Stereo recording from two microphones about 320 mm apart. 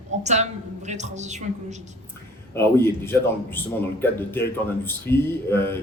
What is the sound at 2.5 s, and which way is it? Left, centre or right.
Speech, centre.